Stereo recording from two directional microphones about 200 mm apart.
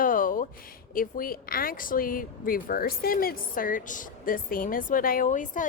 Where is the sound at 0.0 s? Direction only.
45° left (ahead or behind).